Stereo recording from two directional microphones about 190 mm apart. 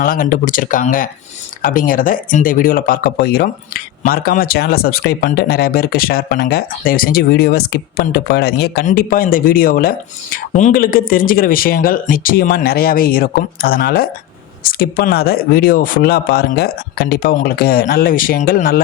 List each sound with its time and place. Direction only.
0.0 s speech: 45° left (ahead or behind)